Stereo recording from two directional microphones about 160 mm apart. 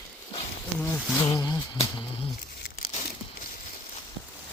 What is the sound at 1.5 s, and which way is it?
Speech, 25° left (ahead or behind).